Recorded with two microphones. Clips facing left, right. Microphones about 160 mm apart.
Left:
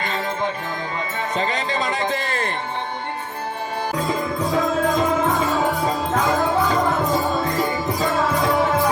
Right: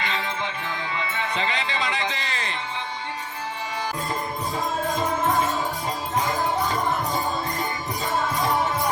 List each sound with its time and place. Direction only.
0.0 s music: 45° left (ahead or behind)
1.2 s speech: 45° left (ahead or behind)
3.9 s music: 90° left